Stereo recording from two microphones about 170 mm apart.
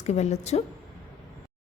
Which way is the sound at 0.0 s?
40° left (ahead or behind).